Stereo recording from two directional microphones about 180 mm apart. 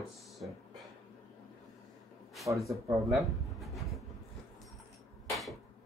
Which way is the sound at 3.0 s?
Centre (ahead or behind).